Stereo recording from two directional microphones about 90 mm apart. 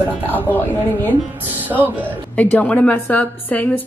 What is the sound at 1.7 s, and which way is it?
Speech, 25° right (ahead or behind).